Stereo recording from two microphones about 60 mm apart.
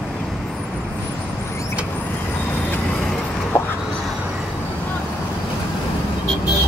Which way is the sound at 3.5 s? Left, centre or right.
Left.